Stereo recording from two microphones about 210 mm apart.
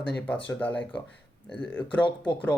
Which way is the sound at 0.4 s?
5° left (ahead or behind).